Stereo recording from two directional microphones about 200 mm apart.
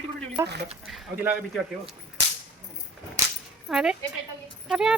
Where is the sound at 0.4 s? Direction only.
55° right (ahead or behind).